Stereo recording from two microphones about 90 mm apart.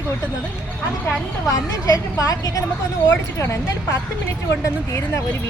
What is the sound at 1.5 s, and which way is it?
Speech, 40° left (ahead or behind).